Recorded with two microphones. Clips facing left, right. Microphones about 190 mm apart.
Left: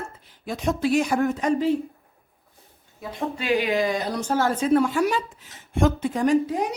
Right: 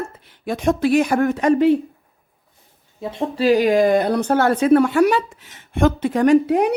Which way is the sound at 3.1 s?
35° right (ahead or behind).